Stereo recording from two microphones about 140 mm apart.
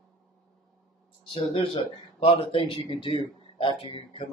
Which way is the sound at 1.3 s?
40° left (ahead or behind).